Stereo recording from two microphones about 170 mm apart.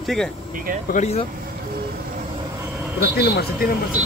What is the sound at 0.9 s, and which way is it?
Speech, 40° left (ahead or behind).